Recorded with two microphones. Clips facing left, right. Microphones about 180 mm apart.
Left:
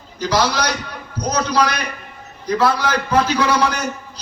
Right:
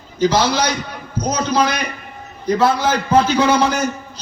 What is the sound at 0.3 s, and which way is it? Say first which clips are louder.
A man's voice: right 1 dB; 25° right (ahead or behind).